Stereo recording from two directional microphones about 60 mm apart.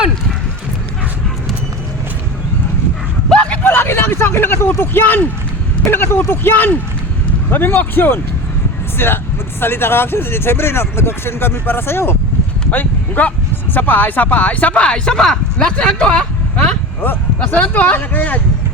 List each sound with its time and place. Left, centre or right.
3.2 s vehicle: centre
3.6 s vehicle: left
4.8 s speech: left
12.7 s speech: left
15.2 s speech: centre
15.6 s speech: centre
17.0 s speech: left